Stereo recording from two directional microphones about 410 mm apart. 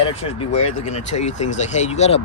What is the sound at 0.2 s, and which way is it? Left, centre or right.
Speech, centre.